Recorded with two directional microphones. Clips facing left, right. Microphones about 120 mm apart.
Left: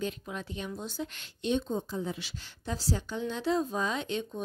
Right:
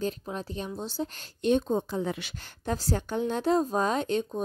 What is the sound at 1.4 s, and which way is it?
A woman's voice, 50° right (ahead or behind).